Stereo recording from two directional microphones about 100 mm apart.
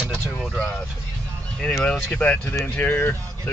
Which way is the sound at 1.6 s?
15° left (ahead or behind).